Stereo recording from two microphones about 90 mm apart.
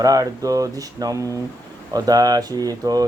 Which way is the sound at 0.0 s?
40° right (ahead or behind).